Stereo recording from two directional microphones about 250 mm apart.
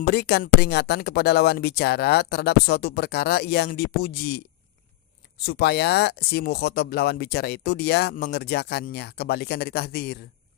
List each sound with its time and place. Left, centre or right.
0.0 s speech: left